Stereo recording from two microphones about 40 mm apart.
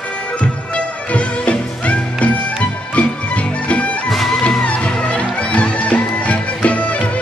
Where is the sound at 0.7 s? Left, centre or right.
Left.